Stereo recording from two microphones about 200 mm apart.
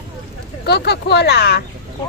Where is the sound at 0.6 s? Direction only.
55° left (ahead or behind).